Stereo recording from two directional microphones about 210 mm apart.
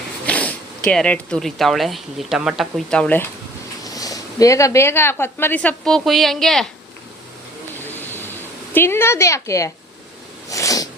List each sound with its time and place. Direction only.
0.3 s zipper: 5° left (ahead or behind)
0.9 s speech: 5° left (ahead or behind)
8.7 s speech: 10° left (ahead or behind)
10.5 s cat: 15° left (ahead or behind)